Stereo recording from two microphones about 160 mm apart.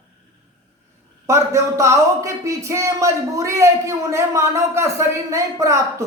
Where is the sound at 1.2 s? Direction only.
20° right (ahead or behind).